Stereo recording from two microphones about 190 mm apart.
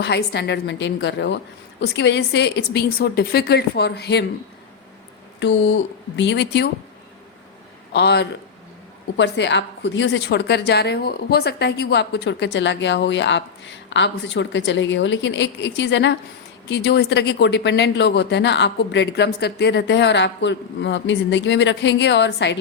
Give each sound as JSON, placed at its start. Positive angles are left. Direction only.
{"t": 0.0, "sound": "speech", "side_deg": 60}
{"t": 5.4, "sound": "a woman's voice", "side_deg": 70}
{"t": 7.9, "sound": "a woman's voice", "side_deg": 65}